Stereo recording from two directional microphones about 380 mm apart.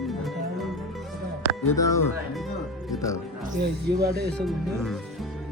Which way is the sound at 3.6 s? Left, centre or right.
Right.